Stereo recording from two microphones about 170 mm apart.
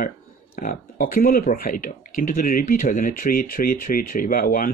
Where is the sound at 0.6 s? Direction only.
55° left (ahead or behind).